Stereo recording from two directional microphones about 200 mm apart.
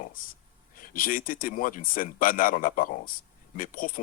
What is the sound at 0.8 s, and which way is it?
Speech, 45° left (ahead or behind).